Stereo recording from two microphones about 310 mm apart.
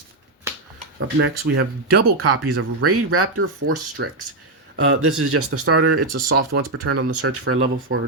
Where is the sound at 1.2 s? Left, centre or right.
Right.